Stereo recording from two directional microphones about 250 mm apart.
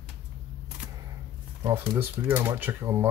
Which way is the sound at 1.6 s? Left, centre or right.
Centre.